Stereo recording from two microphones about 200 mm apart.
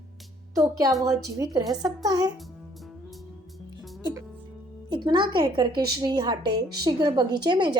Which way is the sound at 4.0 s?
20° right (ahead or behind).